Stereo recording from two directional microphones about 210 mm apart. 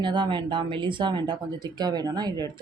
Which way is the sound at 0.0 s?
20° right (ahead or behind).